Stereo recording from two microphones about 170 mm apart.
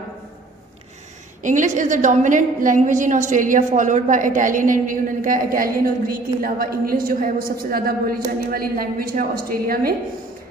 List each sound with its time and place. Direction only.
1.4 s a woman's voice: 50° right (ahead or behind)